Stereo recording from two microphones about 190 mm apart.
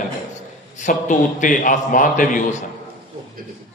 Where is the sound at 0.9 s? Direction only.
40° left (ahead or behind).